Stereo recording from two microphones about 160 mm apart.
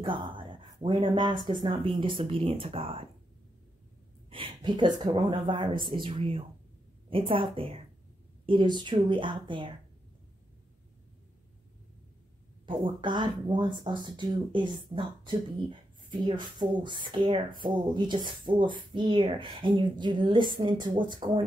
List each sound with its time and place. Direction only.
0.0 s a sound: 30° right (ahead or behind)
1.1 s speech: 25° right (ahead or behind)
4.3 s speech: 30° right (ahead or behind)
12.6 s speech: 30° right (ahead or behind)